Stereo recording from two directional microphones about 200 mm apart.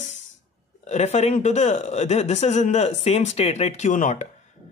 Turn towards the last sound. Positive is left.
turn(degrees=35)  # may be behind; listen again after turning